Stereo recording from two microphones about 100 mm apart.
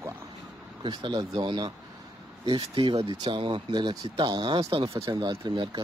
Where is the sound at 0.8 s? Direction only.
45° right (ahead or behind).